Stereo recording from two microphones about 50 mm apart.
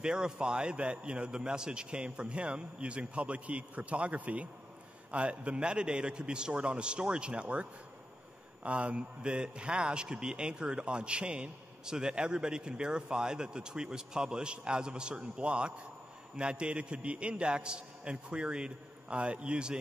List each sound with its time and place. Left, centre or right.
0.0 s a man's voice: centre
8.6 s a man's voice: right